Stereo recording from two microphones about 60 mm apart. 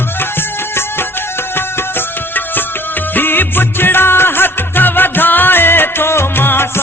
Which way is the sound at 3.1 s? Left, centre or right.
Left.